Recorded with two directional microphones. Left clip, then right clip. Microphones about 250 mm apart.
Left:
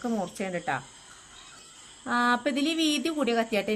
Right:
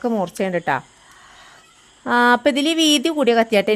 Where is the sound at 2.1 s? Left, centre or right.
Right.